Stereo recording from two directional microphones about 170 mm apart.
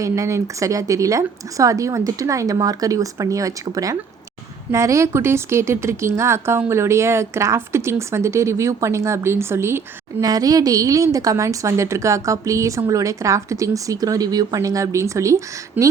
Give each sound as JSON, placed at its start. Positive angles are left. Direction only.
{"t": 0.0, "sound": "a woman's voice", "side_deg": -20}